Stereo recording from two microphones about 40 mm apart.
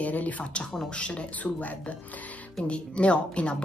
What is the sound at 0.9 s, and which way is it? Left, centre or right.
Speech, left.